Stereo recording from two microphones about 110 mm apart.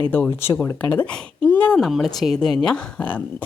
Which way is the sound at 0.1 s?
20° left (ahead or behind).